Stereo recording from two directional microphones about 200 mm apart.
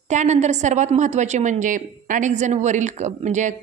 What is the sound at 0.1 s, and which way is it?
A woman's voice, 35° right (ahead or behind).